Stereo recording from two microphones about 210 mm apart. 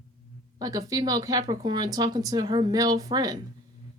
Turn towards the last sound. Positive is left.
turn(degrees=-20)  # may be behind; listen again after turning